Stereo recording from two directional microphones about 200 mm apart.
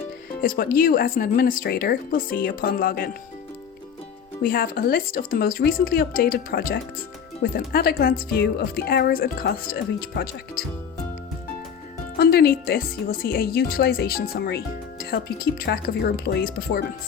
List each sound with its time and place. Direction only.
0.4 s speech: 45° left (ahead or behind)
4.4 s speech: 45° left (ahead or behind)
12.1 s speech: 50° left (ahead or behind)